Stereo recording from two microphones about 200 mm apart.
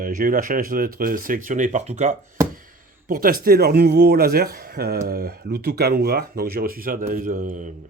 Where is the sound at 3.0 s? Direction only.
45° right (ahead or behind).